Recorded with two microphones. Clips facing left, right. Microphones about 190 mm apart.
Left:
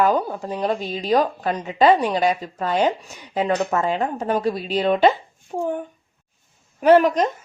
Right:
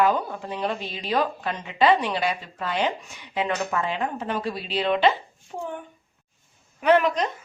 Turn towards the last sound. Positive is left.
turn(degrees=40)  # may be behind; listen again after turning